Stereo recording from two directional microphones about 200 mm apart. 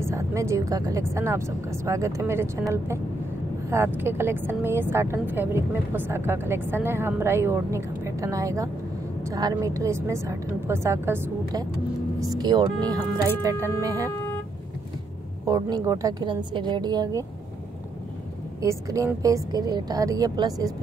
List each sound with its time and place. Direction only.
0.0 s speech: 15° right (ahead or behind)
3.7 s speech: 10° right (ahead or behind)
15.4 s speech: 15° right (ahead or behind)
18.6 s speech: 15° right (ahead or behind)